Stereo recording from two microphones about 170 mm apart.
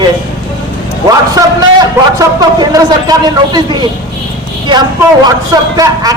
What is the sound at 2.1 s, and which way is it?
A man's voice, 20° right (ahead or behind).